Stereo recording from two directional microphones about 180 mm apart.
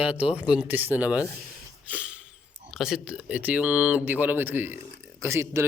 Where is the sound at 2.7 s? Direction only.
5° right (ahead or behind).